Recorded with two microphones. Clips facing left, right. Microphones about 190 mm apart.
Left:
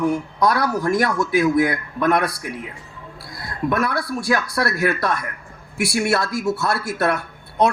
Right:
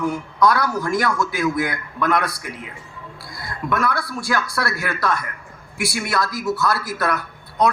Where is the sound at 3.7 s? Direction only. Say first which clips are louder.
Right 1 dB; 25° left (ahead or behind).